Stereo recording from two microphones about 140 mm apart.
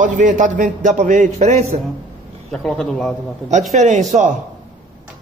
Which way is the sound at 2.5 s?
5° left (ahead or behind).